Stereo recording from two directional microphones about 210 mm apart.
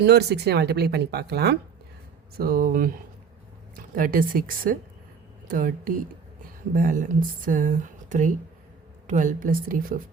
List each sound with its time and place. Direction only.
0.0 s speech: 50° right (ahead or behind)